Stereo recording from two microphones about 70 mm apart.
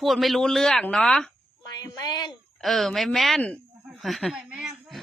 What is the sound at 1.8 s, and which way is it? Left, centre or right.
Speech, left.